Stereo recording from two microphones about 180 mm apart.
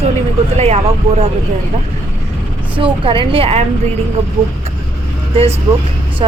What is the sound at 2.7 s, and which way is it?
Speech, 30° right (ahead or behind).